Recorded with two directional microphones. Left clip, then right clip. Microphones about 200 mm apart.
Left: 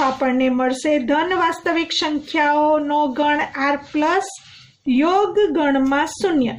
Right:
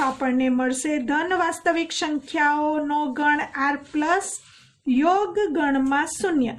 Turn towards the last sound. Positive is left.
turn(degrees=-40)  # may be behind; listen again after turning